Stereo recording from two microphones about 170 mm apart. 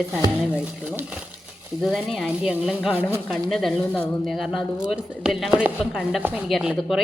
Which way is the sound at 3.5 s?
Centre (ahead or behind).